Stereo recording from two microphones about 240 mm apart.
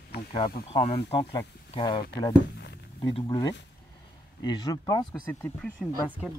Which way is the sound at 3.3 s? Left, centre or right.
Centre.